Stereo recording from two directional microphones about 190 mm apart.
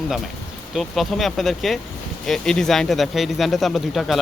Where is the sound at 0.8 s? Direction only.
Centre (ahead or behind).